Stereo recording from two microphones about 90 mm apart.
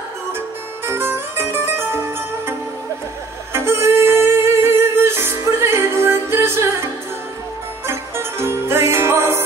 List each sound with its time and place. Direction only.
0.8 s music: 25° right (ahead or behind)
3.5 s music: 30° right (ahead or behind)
7.8 s music: 30° right (ahead or behind)